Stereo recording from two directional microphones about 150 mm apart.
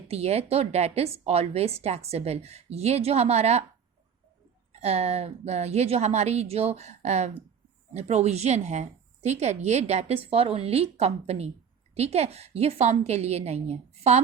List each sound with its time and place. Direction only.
0.1 s a woman's voice: 45° right (ahead or behind)
4.7 s a woman's voice: 45° right (ahead or behind)